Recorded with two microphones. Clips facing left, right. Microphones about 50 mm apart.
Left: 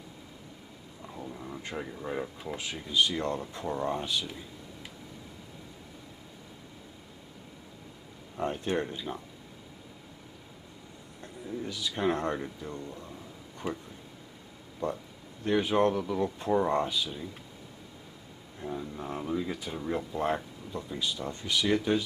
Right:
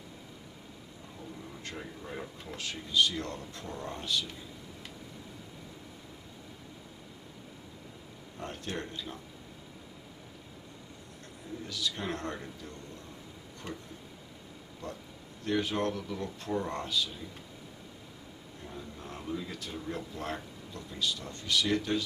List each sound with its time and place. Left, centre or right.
1.1 s speech: left
8.4 s speech: centre
11.6 s speech: centre
13.6 s speech: centre
15.4 s speech: centre
18.6 s speech: centre